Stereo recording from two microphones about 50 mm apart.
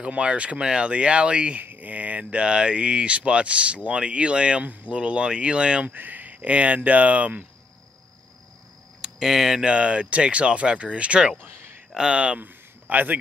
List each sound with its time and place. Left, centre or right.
0.0 s speech: right
1.6 s speech: right
5.9 s speech: right
9.0 s speech: centre
9.7 s speech: right
11.3 s a sound: right
11.9 s speech: centre
12.4 s a sound: right